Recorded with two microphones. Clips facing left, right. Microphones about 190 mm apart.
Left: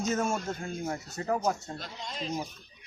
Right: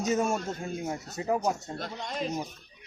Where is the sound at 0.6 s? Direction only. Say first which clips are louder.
Right 1 dB; 15° right (ahead or behind).